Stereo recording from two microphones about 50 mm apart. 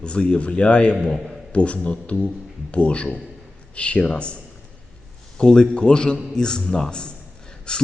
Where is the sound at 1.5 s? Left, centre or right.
Left.